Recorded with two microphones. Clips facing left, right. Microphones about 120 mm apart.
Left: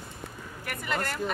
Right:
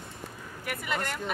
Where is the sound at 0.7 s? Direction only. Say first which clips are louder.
Left 1 dB; 5° right (ahead or behind).